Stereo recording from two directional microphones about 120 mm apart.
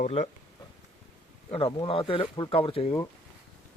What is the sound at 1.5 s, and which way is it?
Speech, 50° left (ahead or behind).